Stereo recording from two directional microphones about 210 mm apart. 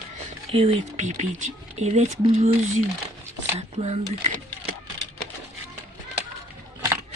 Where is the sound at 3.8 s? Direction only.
30° right (ahead or behind).